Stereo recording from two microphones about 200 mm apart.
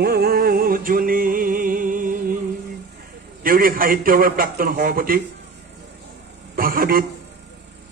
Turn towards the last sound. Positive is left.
turn(degrees=-45)  # may be behind; listen again after turning